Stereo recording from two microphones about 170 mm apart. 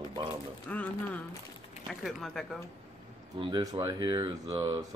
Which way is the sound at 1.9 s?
Centre (ahead or behind).